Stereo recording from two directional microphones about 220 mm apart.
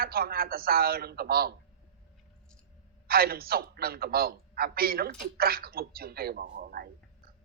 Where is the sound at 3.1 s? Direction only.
45° right (ahead or behind).